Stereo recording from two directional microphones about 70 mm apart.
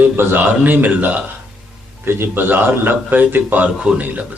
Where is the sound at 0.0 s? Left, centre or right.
Right.